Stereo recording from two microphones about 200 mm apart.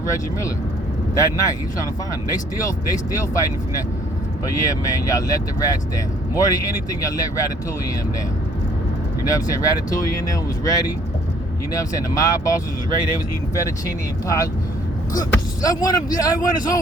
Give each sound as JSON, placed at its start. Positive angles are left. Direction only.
{"t": 1.1, "sound": "speech", "side_deg": 15}
{"t": 4.4, "sound": "speech", "side_deg": 15}
{"t": 9.2, "sound": "speech", "side_deg": 15}